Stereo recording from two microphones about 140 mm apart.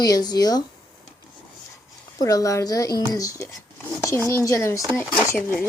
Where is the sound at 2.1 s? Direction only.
25° left (ahead or behind).